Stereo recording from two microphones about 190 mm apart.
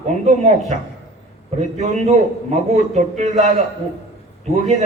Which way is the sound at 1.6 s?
35° right (ahead or behind).